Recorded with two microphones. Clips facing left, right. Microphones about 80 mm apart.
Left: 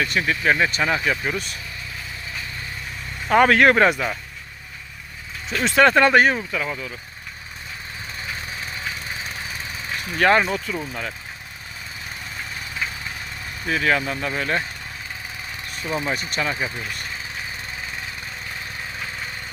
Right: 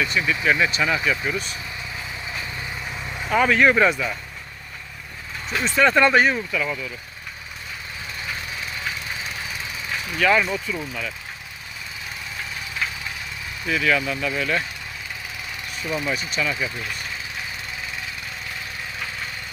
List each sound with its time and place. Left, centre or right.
0.0 s speech: left
3.2 s speech: left
5.6 s speech: left
5.9 s speech: left
6.3 s speech: left
10.1 s speech: left
13.7 s speech: left
15.7 s speech: left
16.1 s speech: left